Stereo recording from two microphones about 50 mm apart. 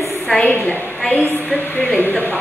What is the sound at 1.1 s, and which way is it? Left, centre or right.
A woman's voice, left.